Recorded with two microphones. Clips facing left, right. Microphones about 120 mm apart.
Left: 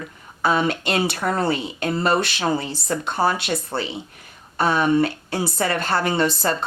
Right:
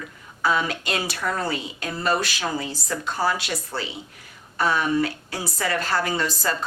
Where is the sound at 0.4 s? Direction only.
25° left (ahead or behind).